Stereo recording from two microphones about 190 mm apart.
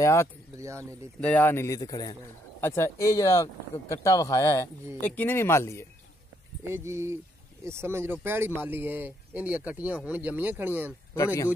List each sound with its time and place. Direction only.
0.0 s speech: 15° left (ahead or behind)
6.6 s speech: 15° right (ahead or behind)
10.9 s speech: 15° left (ahead or behind)